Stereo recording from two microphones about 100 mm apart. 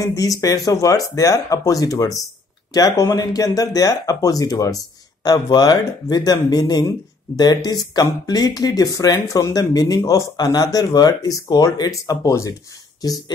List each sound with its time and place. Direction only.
0.0 s speech: 35° left (ahead or behind)